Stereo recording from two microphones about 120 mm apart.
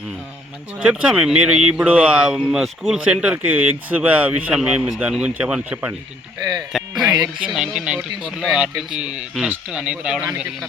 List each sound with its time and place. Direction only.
0.8 s speech: 10° right (ahead or behind)
6.7 s music: 5° right (ahead or behind)
7.3 s speech: 10° right (ahead or behind)